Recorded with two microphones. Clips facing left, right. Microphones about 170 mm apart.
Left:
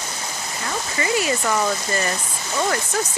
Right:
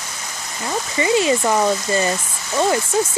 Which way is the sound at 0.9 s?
25° right (ahead or behind).